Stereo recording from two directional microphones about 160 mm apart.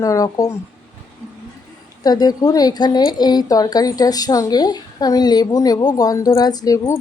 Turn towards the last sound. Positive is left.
turn(degrees=20)  # may be behind; listen again after turning